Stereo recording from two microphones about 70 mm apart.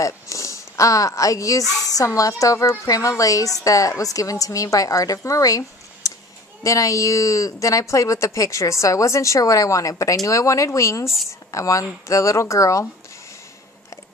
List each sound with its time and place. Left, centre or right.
0.0 s a woman's voice: left